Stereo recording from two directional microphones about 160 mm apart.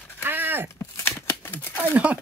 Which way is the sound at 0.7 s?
15° left (ahead or behind).